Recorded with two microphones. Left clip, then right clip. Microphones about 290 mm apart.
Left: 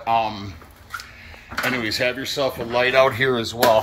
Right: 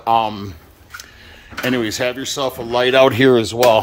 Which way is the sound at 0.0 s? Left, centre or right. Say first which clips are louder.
Right 4 dB; right.